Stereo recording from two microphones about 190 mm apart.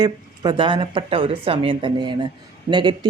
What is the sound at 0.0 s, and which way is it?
A woman's voice, 25° right (ahead or behind).